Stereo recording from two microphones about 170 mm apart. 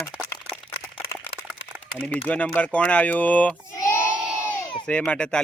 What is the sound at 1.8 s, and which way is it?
Speech, 10° left (ahead or behind).